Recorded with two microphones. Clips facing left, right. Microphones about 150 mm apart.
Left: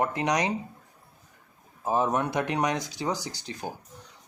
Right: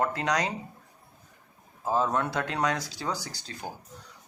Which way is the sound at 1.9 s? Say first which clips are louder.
Left 1 dB; 15° left (ahead or behind).